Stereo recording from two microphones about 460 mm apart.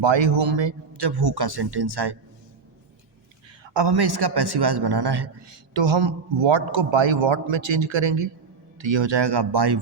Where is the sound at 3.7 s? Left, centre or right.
Right.